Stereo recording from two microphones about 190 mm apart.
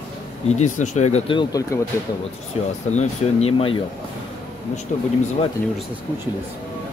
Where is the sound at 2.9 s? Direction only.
35° left (ahead or behind).